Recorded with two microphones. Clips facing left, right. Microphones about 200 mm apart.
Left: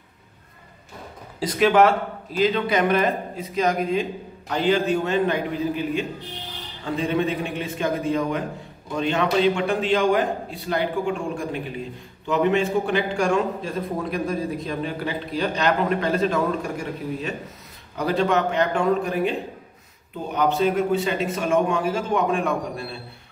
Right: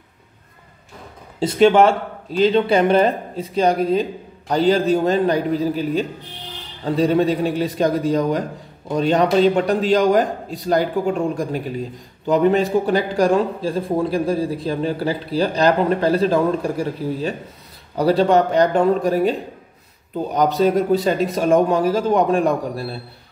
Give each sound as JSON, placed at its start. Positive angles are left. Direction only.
{"t": 1.4, "sound": "a man's voice", "side_deg": -25}
{"t": 20.3, "sound": "a man's voice", "side_deg": -40}